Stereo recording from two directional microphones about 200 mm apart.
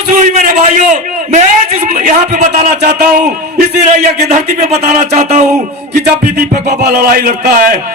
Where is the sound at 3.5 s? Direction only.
35° right (ahead or behind).